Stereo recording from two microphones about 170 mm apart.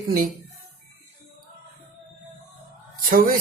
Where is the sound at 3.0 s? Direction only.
55° right (ahead or behind).